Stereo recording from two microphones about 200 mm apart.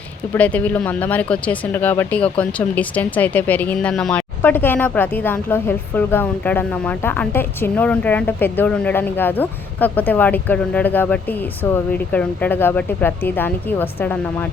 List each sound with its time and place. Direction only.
0.3 s speech: 5° left (ahead or behind)